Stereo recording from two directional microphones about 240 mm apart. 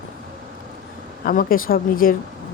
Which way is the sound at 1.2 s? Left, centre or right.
Left.